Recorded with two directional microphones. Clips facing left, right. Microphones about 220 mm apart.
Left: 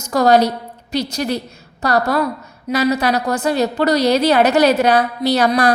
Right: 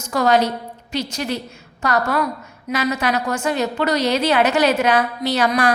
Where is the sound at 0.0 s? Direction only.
40° left (ahead or behind).